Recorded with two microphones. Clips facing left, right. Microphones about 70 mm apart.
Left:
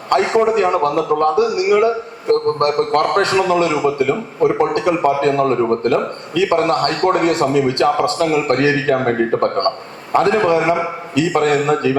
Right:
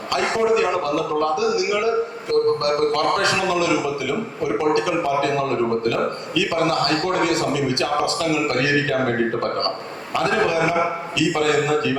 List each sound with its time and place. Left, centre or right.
0.1 s a man's voice: left